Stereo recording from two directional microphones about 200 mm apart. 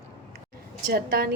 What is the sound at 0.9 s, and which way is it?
Speech, 45° right (ahead or behind).